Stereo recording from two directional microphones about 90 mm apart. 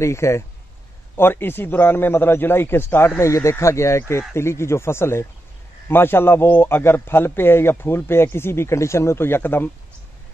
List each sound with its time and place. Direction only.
0.0 s a man's voice: 30° left (ahead or behind)